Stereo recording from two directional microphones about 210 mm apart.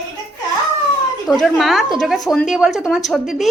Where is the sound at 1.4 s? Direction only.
Centre (ahead or behind).